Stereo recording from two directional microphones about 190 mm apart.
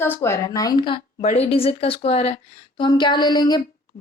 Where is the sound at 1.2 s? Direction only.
40° left (ahead or behind).